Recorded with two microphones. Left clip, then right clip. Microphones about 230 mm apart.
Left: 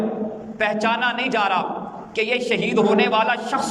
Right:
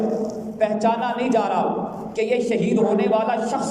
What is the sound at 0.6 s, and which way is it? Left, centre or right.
A man's voice, left.